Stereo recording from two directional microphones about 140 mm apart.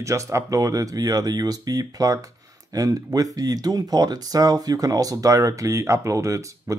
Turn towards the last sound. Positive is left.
turn(degrees=-20)  # may be behind; listen again after turning